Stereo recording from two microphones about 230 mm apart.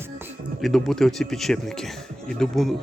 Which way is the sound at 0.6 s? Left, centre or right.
Centre.